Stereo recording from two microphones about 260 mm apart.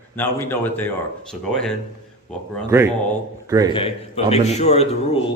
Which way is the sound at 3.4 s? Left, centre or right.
Centre.